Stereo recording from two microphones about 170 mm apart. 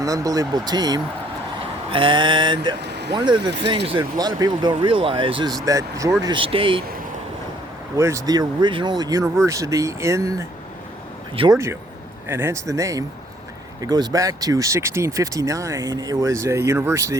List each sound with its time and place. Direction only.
0.0 s speech: 20° right (ahead or behind)
2.8 s vehicle: 85° right
3.2 s speech: 25° right (ahead or behind)
5.6 s speech: 20° right (ahead or behind)
7.9 s speech: 15° right (ahead or behind)
11.5 s speech: 15° right (ahead or behind)